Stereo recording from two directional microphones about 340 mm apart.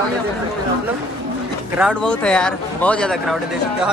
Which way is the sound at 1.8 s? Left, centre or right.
Centre.